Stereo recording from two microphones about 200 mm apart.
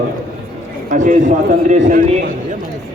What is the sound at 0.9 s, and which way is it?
A man's voice, 40° right (ahead or behind).